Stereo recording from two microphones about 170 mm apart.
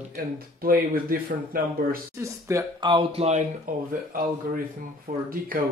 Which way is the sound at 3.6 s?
55° right (ahead or behind).